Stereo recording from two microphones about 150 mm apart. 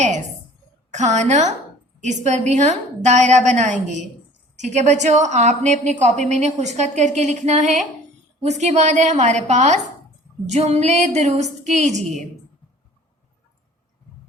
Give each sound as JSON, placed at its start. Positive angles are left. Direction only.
{"t": 0.9, "sound": "a woman's voice", "side_deg": -50}